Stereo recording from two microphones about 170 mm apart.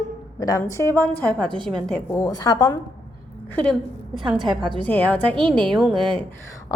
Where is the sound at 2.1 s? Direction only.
20° left (ahead or behind).